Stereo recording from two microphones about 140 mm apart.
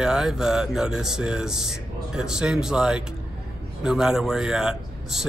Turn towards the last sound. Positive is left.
turn(degrees=-5)  # may be behind; listen again after turning